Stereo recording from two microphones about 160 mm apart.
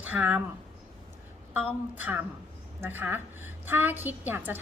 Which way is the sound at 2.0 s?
10° right (ahead or behind).